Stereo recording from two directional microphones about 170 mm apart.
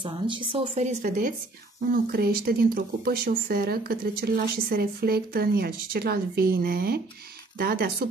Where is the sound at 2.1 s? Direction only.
65° right (ahead or behind).